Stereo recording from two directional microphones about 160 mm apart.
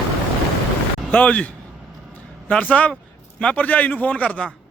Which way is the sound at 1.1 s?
10° left (ahead or behind).